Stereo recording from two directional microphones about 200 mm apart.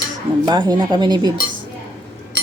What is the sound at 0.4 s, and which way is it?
Speech, 20° right (ahead or behind).